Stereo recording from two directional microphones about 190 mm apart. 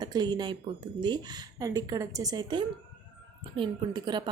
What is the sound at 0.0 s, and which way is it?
A woman's voice, 20° right (ahead or behind).